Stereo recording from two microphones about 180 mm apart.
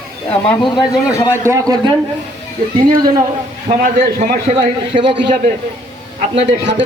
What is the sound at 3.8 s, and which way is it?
Speech, 45° right (ahead or behind).